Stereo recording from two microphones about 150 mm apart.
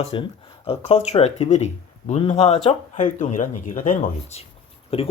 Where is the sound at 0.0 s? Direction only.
35° left (ahead or behind); by 4.4 s 60° left (ahead or behind).